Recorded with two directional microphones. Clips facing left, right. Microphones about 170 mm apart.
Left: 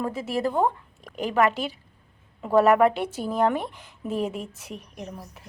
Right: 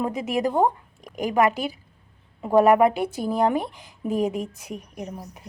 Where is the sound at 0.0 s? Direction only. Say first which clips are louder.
Right 2 dB; 15° right (ahead or behind).